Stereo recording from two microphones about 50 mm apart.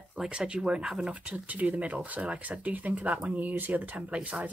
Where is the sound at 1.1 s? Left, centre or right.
Right.